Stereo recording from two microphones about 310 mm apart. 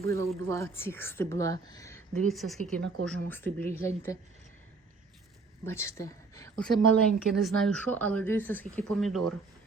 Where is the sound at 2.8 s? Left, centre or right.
Right.